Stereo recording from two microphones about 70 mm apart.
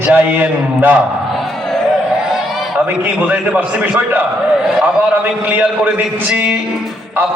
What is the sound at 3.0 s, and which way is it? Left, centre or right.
A man's voice, right.